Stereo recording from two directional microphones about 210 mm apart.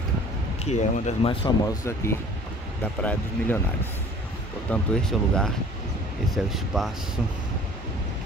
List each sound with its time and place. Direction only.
0.7 s speech: 35° left (ahead or behind)
2.8 s speech: 10° left (ahead or behind)